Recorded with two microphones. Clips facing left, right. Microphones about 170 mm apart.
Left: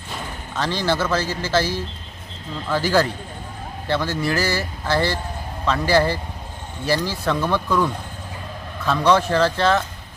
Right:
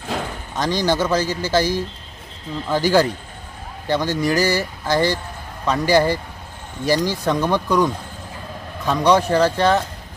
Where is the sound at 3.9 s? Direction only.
15° right (ahead or behind).